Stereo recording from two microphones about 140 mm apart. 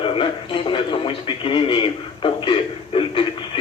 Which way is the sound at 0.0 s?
40° left (ahead or behind).